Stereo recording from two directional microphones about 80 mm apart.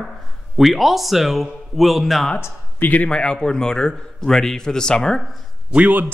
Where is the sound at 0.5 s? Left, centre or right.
Centre.